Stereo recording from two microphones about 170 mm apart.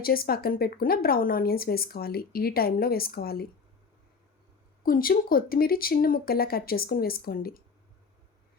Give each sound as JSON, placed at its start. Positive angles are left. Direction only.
{"t": 0.0, "sound": "speech", "side_deg": 60}
{"t": 4.8, "sound": "speech", "side_deg": 60}